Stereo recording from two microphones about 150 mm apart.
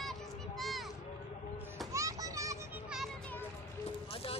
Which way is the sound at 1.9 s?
20° right (ahead or behind).